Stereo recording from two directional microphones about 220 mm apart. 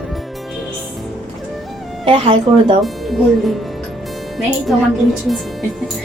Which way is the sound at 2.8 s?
Centre (ahead or behind).